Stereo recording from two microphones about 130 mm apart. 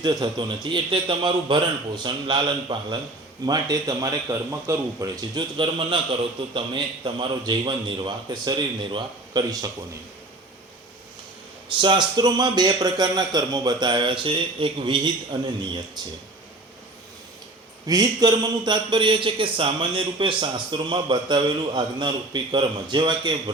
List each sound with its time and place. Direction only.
0.0 s speech: 30° right (ahead or behind)
11.8 s speech: 35° right (ahead or behind)
17.8 s speech: 30° right (ahead or behind)